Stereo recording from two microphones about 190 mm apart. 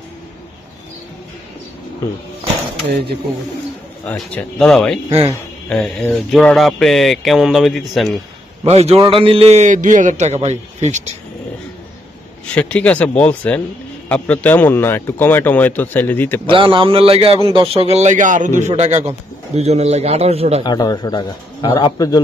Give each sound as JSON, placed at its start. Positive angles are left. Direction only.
{"t": 4.1, "sound": "speech", "side_deg": 10}
{"t": 8.6, "sound": "a man's voice", "side_deg": -35}
{"t": 12.5, "sound": "speech", "side_deg": 10}
{"t": 16.5, "sound": "a man's voice", "side_deg": -25}
{"t": 20.6, "sound": "a man's voice", "side_deg": 20}